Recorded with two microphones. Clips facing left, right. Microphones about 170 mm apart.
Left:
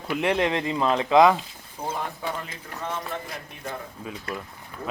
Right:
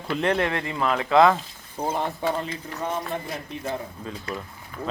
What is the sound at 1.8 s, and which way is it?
Speech, 35° right (ahead or behind).